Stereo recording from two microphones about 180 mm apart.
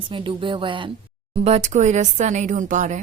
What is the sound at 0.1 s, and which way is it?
Speech, 30° right (ahead or behind).